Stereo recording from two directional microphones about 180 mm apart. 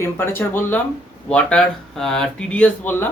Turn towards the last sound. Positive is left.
turn(degrees=10)  # may be behind; listen again after turning